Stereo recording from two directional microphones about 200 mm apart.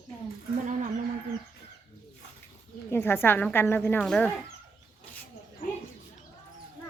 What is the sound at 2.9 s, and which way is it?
Speech, 10° left (ahead or behind).